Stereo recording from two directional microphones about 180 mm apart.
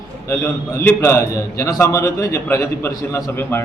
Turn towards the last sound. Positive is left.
turn(degrees=15)  # may be behind; listen again after turning